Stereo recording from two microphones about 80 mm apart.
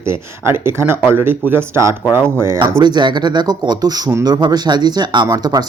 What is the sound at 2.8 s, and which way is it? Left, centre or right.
Speech, right.